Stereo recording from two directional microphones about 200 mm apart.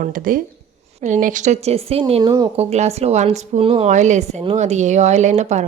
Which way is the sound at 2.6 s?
30° right (ahead or behind).